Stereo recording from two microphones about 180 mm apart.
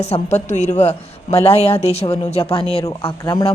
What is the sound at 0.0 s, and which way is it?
A woman's voice, 35° left (ahead or behind).